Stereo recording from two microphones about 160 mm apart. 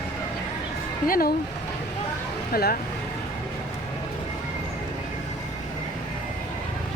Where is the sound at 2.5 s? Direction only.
70° left (ahead or behind).